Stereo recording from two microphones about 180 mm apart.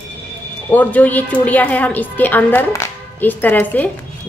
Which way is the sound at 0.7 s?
10° left (ahead or behind).